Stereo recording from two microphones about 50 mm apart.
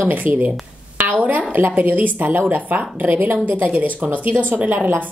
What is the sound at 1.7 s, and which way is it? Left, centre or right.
A woman's voice, right.